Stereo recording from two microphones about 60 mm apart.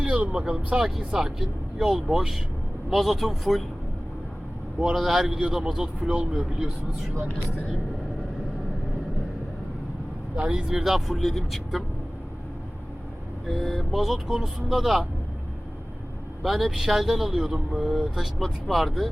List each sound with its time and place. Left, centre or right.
0.0 s speech: centre
4.8 s speech: centre
7.3 s speech: left
10.3 s speech: centre
13.5 s speech: centre
16.4 s speech: centre
18.2 s speech: centre